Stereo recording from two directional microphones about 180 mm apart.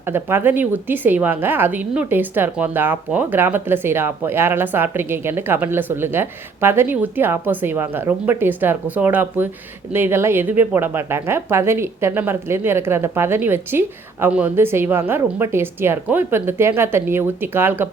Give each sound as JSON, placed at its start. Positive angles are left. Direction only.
{"t": 0.0, "sound": "speech", "side_deg": -10}